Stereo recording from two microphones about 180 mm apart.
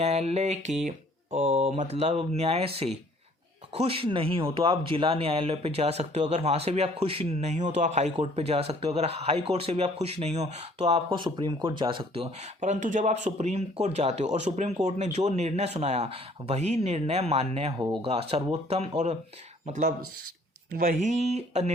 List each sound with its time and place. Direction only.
0.0 s speech: 35° right (ahead or behind)
12.5 s speech: 45° right (ahead or behind)